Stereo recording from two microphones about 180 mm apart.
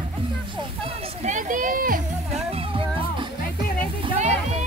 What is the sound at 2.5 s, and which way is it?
Music, 30° right (ahead or behind).